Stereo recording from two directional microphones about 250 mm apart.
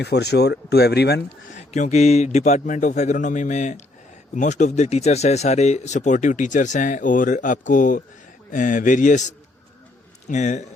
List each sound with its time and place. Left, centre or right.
0.0 s speech: left
1.7 s speech: left